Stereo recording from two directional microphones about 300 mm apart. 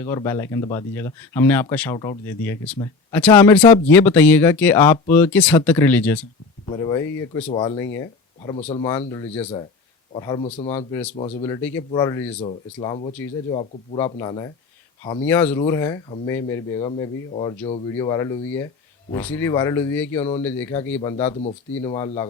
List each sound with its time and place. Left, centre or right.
0.0 s speech: centre